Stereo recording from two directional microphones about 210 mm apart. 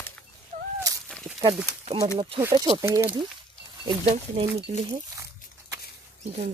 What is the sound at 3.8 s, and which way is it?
Speech, 25° right (ahead or behind).